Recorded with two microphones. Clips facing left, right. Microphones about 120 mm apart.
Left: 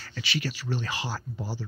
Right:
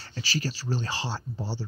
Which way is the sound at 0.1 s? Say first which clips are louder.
Right 1 dB; 35° right (ahead or behind).